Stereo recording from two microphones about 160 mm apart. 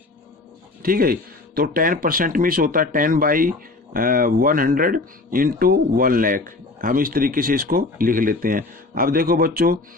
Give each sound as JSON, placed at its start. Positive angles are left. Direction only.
{"t": 0.8, "sound": "speech", "side_deg": -65}